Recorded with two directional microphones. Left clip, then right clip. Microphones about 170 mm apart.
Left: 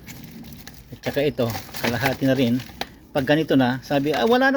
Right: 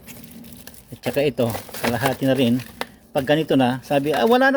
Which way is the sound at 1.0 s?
30° right (ahead or behind).